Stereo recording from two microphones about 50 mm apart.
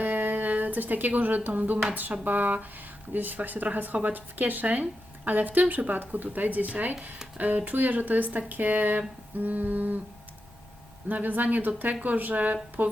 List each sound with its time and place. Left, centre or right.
0.0 s a sound: right
2.2 s speech: right
11.1 s speech: right